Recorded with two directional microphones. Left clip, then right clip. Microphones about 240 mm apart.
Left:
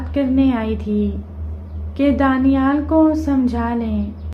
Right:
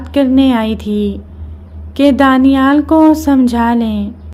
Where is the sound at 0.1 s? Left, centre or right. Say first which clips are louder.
Right 7 dB; right.